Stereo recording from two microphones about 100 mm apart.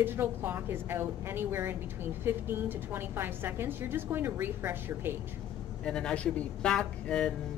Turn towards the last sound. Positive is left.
turn(degrees=5)  # may be behind; listen again after turning